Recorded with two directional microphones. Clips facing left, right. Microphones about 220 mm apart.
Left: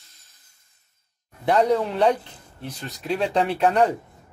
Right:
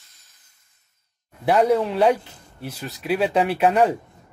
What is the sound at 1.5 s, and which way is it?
A man's voice, 5° right (ahead or behind).